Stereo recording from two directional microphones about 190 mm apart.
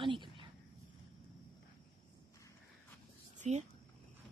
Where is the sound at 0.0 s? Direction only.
25° right (ahead or behind).